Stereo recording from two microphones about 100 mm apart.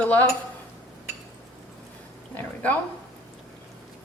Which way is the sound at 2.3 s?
15° left (ahead or behind).